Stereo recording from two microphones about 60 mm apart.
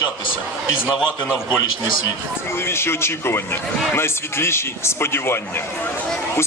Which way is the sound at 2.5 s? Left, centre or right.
Left.